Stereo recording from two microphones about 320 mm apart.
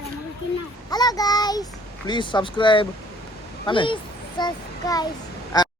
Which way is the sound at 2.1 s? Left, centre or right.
Centre.